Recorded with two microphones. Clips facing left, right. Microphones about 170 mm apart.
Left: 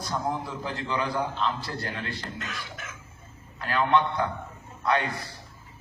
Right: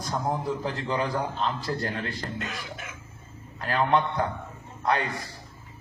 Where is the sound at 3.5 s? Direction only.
35° right (ahead or behind).